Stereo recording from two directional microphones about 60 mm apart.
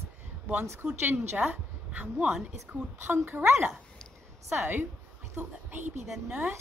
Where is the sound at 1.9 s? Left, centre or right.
Right.